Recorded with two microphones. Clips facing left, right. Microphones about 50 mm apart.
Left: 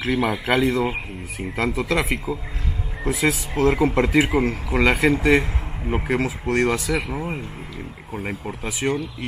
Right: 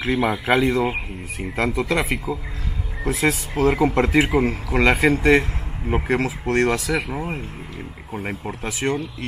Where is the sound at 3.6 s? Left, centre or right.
Centre.